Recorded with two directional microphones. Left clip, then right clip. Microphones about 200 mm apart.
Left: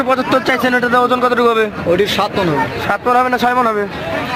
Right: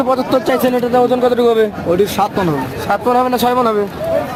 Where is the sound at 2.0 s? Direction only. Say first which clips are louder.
Right 2 dB; 45° right (ahead or behind).